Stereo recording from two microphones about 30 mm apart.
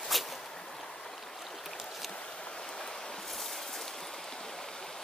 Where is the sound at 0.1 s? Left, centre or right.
Centre.